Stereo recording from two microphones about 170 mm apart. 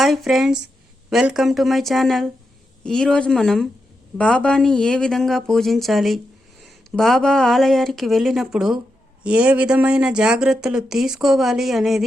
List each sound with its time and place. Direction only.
0.0 s speech: centre (ahead or behind)